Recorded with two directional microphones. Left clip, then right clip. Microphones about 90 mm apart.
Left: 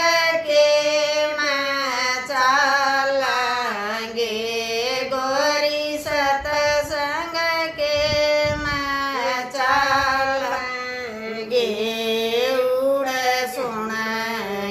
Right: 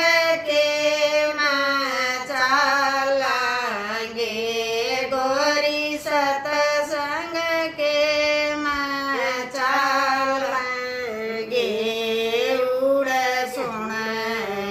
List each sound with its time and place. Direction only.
0.0 s child singing: 25° left (ahead or behind)
2.0 s female singing: 20° left (ahead or behind)
5.1 s child singing: 20° left (ahead or behind)
7.3 s female singing: 20° left (ahead or behind)
11.5 s music: 20° left (ahead or behind)